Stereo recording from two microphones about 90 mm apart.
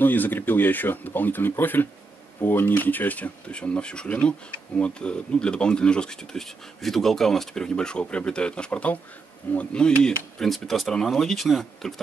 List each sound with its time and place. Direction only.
0.0 s speech: 20° left (ahead or behind); by 11.9 s centre (ahead or behind)